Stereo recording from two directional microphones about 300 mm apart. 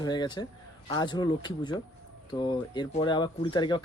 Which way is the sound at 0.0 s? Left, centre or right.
Centre.